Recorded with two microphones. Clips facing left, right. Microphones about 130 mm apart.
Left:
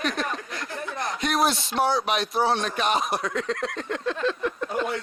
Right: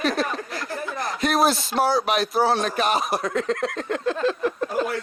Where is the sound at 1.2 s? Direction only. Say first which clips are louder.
Right 3 dB; 35° right (ahead or behind).